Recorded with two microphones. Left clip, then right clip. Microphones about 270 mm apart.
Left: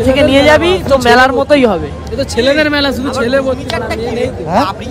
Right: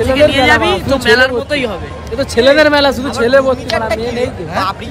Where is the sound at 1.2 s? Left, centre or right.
Left.